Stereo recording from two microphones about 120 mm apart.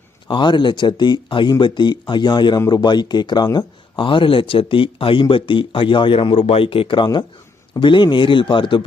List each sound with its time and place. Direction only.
0.3 s a man's voice: 40° left (ahead or behind)